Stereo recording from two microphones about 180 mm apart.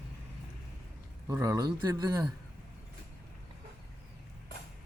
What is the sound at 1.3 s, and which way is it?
Speech, 15° right (ahead or behind).